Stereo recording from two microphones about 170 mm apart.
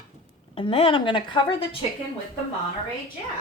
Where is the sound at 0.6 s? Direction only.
30° left (ahead or behind).